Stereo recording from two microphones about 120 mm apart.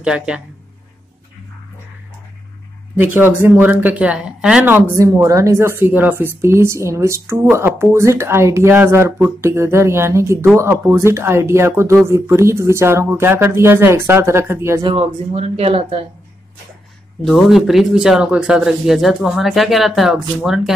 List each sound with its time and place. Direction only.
0.0 s speech: 10° right (ahead or behind)
3.0 s speech: 15° right (ahead or behind)
15.0 s speech: 55° right (ahead or behind)
17.2 s speech: centre (ahead or behind)